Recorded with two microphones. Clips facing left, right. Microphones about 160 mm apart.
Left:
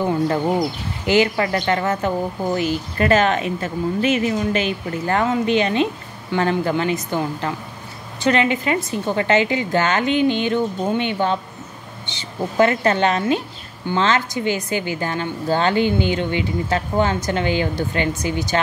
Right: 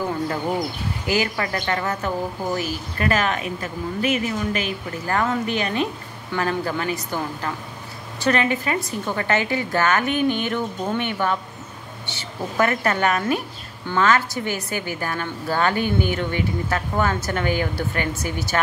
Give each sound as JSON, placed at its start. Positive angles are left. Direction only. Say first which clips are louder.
{"t": 0.3, "sound": "a woman's voice", "louder": "left 5 dB", "side_deg": 30}